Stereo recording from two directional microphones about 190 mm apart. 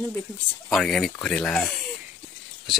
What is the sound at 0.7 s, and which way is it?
Speech, centre (ahead or behind).